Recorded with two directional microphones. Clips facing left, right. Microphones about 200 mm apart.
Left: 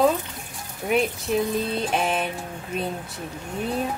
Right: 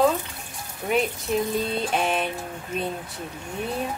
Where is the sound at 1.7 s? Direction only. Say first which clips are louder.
Even; centre (ahead or behind).